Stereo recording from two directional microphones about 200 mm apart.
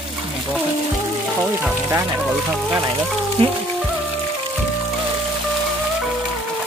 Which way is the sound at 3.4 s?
25° right (ahead or behind).